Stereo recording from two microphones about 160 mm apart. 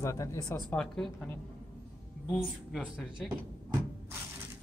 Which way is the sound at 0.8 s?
5° left (ahead or behind).